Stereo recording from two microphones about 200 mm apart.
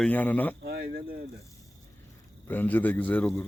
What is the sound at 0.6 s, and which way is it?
Speech, 50° right (ahead or behind).